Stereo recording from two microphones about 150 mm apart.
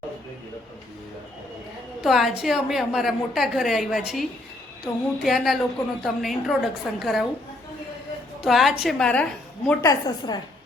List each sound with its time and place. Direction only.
2.0 s a woman's voice: centre (ahead or behind)
8.4 s a woman's voice: centre (ahead or behind)
9.8 s a woman's voice: 25° left (ahead or behind)